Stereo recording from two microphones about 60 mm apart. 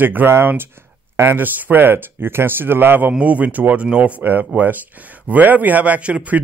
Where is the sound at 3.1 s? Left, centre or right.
Right.